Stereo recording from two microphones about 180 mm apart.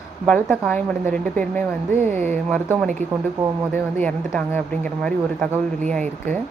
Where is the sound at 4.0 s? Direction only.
10° left (ahead or behind).